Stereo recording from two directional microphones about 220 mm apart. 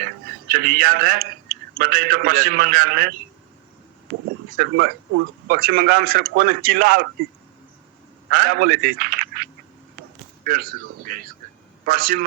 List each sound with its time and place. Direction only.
0.0 s a man's voice: 40° right (ahead or behind)
8.3 s a man's voice: 40° right (ahead or behind)